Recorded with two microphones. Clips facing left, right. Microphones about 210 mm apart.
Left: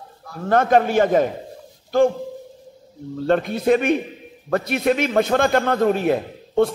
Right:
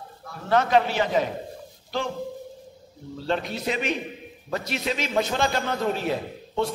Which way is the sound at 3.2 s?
50° left (ahead or behind).